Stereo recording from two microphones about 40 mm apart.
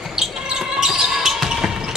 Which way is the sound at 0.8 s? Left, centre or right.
Centre.